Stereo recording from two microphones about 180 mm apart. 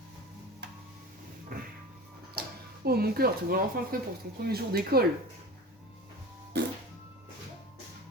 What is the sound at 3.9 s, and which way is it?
Speech, 55° right (ahead or behind).